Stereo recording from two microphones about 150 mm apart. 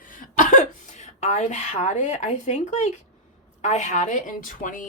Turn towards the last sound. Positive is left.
turn(degrees=60)  # may be behind; listen again after turning